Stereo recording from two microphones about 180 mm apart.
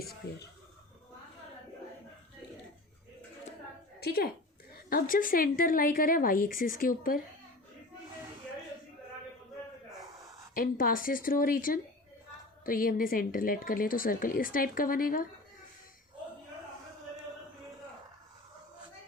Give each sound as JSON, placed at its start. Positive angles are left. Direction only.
{"t": 4.0, "sound": "a woman's voice", "side_deg": 60}
{"t": 10.5, "sound": "a woman's voice", "side_deg": 50}